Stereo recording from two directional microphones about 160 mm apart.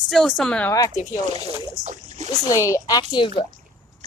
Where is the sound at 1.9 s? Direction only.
50° right (ahead or behind).